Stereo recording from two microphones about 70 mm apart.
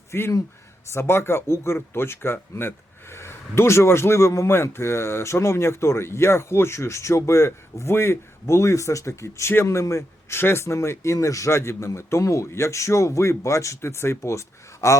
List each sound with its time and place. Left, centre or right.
0.1 s speech: left